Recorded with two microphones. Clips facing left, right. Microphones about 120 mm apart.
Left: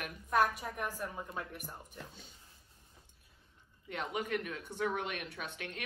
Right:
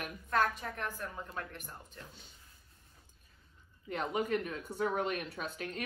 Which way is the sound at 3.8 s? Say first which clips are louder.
Right 4 dB; 40° right (ahead or behind).